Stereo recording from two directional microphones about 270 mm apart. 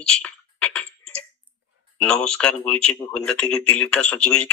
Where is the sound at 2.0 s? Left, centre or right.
Centre.